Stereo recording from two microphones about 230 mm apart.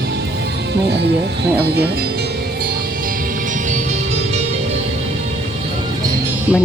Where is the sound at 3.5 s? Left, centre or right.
Right.